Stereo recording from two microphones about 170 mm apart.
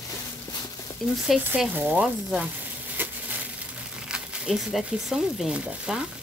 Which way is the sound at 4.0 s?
5° right (ahead or behind).